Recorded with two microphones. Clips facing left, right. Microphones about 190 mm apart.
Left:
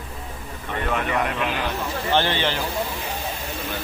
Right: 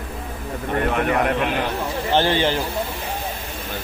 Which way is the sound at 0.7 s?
50° right (ahead or behind).